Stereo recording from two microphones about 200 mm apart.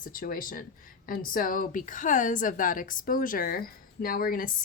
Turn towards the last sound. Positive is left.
turn(degrees=45)  # may be behind; listen again after turning